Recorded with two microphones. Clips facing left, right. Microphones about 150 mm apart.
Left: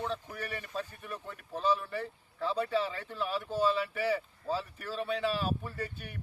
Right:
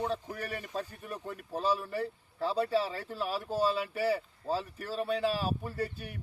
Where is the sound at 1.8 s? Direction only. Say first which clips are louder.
Right 3 dB; 35° right (ahead or behind).